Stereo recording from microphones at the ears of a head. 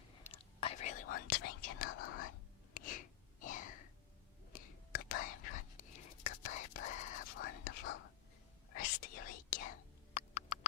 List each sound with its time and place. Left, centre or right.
0.3 s whispering: left